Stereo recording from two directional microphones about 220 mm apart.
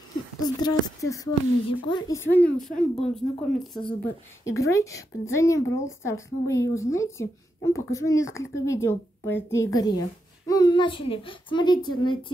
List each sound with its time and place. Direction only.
0.6 s speech: 20° left (ahead or behind); by 3.8 s centre (ahead or behind)
4.5 s a woman's voice: 15° left (ahead or behind)